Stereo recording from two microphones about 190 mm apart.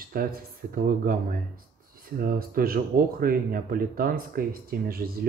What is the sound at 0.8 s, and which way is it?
Speech, 50° right (ahead or behind).